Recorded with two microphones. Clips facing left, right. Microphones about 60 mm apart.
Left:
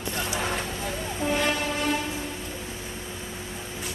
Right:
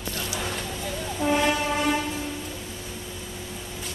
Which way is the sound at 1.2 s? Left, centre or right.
Centre.